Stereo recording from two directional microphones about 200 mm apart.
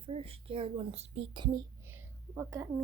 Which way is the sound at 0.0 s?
30° right (ahead or behind).